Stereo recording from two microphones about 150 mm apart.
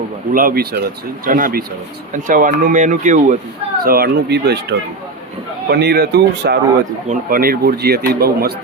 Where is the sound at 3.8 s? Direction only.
85° right.